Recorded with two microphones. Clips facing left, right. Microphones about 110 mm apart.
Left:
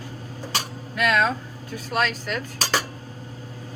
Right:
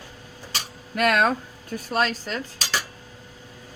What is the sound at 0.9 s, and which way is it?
Speech, 55° right (ahead or behind).